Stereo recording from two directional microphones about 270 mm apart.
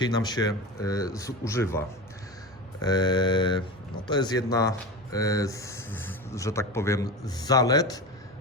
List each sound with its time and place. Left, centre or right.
0.0 s speech: centre
2.8 s speech: centre